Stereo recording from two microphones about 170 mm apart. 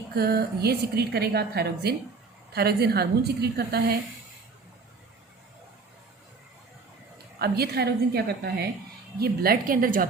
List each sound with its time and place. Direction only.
0.2 s a woman's voice: 65° right (ahead or behind)
7.3 s a woman's voice: 70° right (ahead or behind)